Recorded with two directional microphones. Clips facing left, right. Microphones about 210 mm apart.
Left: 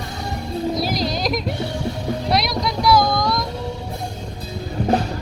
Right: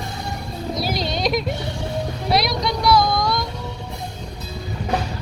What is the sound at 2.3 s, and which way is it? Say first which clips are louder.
Vehicle: right 2 dB; centre (ahead or behind).